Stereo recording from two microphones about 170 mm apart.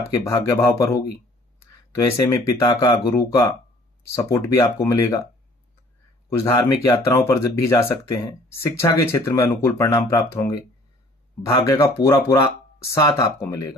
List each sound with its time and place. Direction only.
0.2 s speech: 15° left (ahead or behind)
2.0 s speech: 20° left (ahead or behind)
6.3 s speech: 15° left (ahead or behind)